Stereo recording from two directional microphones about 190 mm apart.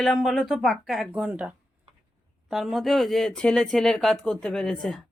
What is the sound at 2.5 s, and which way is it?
Speech, centre (ahead or behind).